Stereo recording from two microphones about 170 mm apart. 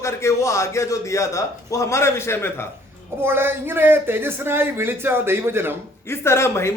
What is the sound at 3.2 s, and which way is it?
Speech, 15° right (ahead or behind).